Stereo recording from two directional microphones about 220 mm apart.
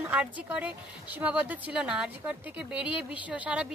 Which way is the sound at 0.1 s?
5° right (ahead or behind).